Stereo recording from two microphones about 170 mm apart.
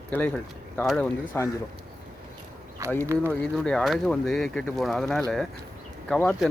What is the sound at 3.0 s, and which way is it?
Speech, 15° right (ahead or behind).